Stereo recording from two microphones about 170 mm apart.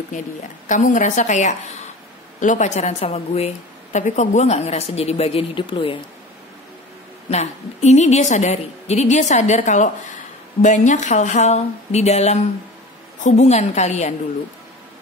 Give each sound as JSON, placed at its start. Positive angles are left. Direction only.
{"t": 0.7, "sound": "a woman's voice", "side_deg": 50}
{"t": 7.2, "sound": "a woman's voice", "side_deg": 40}